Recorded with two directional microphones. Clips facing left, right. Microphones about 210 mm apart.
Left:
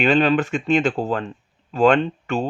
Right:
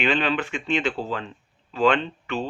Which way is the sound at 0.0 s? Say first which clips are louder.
Left 6 dB; 40° left (ahead or behind).